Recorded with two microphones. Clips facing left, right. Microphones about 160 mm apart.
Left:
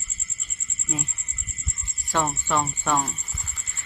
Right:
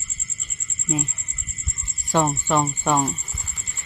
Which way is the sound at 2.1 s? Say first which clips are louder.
Right 4 dB; 20° right (ahead or behind).